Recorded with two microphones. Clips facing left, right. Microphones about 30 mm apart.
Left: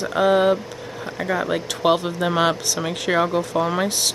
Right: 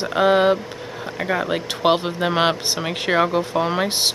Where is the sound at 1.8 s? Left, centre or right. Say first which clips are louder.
Right 1 dB; right.